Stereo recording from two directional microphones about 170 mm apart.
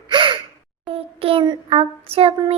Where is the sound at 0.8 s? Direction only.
35° right (ahead or behind).